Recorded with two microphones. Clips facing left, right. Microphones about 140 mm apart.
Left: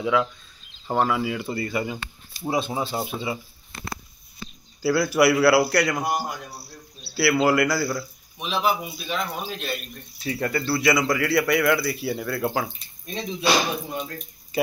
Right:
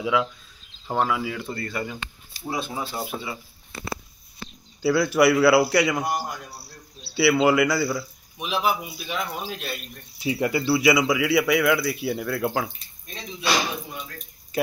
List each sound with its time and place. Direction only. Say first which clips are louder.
0.0 s a man's voice: left 1 dB; 5° right (ahead or behind); by 2.0 s 10° left (ahead or behind)
2.4 s speech: left 4 dB; 25° left (ahead or behind)
4.8 s a man's voice: even; 5° left (ahead or behind)
10.1 s a man's voice: right 2 dB; 15° right (ahead or behind)
13.9 s speech: left 6 dB; 35° left (ahead or behind)